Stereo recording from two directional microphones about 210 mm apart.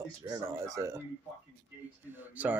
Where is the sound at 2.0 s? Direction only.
10° right (ahead or behind).